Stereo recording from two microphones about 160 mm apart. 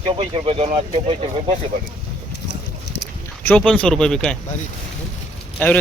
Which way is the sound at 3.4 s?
5° left (ahead or behind).